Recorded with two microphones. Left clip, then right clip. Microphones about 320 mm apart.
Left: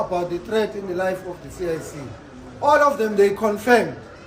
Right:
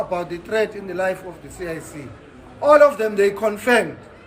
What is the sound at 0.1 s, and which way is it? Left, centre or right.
A man's voice, centre.